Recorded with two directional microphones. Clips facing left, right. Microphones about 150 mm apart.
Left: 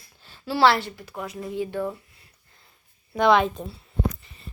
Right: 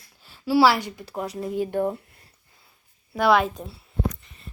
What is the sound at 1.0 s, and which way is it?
Speech, 35° right (ahead or behind).